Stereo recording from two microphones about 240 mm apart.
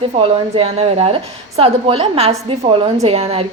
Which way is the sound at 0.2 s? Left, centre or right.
Right.